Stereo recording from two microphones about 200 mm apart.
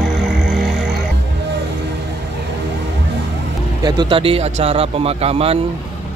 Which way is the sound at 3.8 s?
25° right (ahead or behind).